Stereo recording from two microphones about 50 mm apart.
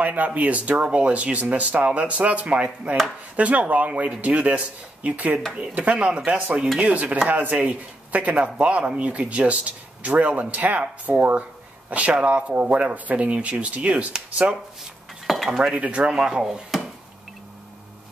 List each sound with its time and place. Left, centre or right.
0.0 s speech: right
15.2 s cutlery: centre
15.7 s speech: right
16.1 s speech: centre